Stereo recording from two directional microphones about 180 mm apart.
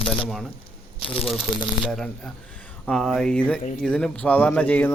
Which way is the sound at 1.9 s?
Centre (ahead or behind).